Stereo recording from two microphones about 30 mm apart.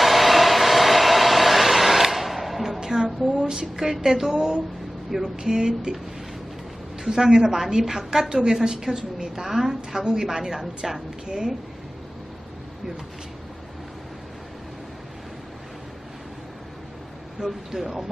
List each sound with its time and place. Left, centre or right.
0.0 s a sound: centre
2.8 s music: centre
3.6 s a woman's voice: centre
7.1 s a woman's voice: centre
9.4 s a woman's voice: centre
10.0 s speech: right
10.2 s a woman's voice: centre
17.7 s a woman's voice: centre